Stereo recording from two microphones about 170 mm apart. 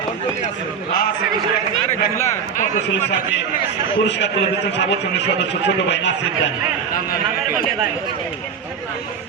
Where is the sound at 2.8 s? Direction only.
90° left.